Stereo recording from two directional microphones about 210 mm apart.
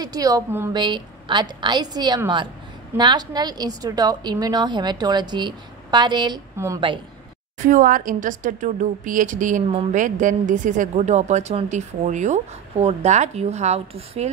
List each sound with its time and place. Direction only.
0.0 s a woman's voice: 15° right (ahead or behind)
7.5 s a woman's voice: 40° right (ahead or behind)